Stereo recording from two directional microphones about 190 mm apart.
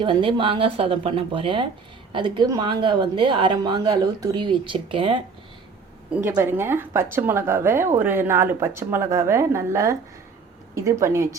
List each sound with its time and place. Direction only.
0.0 s a woman's voice: 25° right (ahead or behind)
6.1 s a woman's voice: 10° right (ahead or behind)